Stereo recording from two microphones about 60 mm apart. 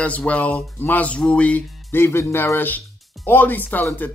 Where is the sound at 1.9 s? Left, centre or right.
Left.